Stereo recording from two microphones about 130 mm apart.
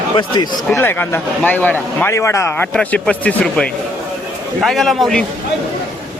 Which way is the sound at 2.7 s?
10° left (ahead or behind).